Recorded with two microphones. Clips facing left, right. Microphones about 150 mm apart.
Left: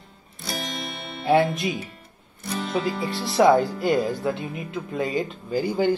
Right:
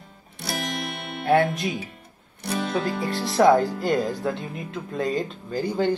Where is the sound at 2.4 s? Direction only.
65° right (ahead or behind).